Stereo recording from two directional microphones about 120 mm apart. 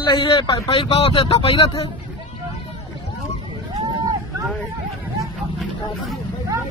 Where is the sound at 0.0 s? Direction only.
45° left (ahead or behind).